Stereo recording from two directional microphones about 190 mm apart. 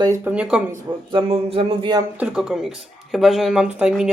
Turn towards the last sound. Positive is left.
turn(degrees=-5)  # may be behind; listen again after turning